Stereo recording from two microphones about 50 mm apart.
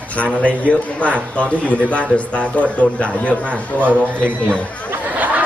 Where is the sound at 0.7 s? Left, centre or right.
Left.